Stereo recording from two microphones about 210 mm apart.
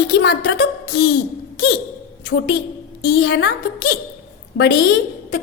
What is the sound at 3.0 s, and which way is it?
A woman's voice, 45° left (ahead or behind).